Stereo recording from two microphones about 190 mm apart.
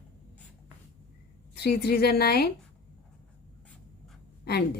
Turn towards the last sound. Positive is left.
turn(degrees=55)  # may be behind; listen again after turning